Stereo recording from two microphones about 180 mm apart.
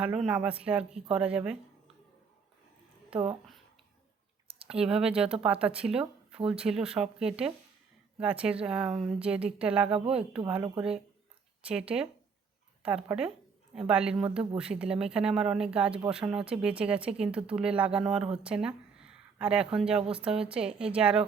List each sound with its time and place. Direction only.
0.0 s speech: 5° right (ahead or behind)
3.1 s speech: 30° right (ahead or behind)
4.7 s speech: 5° right (ahead or behind)
15.9 s speech: 30° right (ahead or behind)
16.1 s speech: 5° right (ahead or behind)